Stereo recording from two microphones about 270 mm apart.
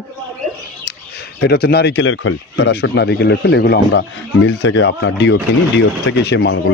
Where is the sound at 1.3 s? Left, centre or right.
Left.